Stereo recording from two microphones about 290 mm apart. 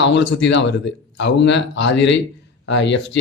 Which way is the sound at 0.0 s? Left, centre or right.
Left.